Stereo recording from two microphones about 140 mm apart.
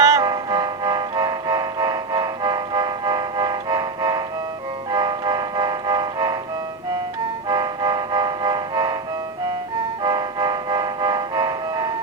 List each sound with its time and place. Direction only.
0.0 s music: 25° right (ahead or behind)
7.4 s music: 30° right (ahead or behind)
10.0 s music: 30° right (ahead or behind)